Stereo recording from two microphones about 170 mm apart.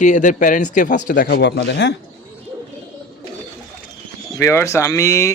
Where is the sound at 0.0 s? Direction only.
45° left (ahead or behind).